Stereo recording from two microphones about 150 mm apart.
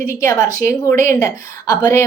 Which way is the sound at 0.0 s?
20° left (ahead or behind).